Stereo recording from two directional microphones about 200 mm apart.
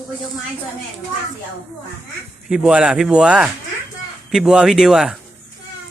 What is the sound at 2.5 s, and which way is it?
Speech, 5° right (ahead or behind).